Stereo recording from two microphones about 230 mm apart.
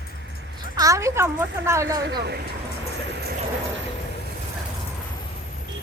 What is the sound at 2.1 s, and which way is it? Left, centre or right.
Speech, right.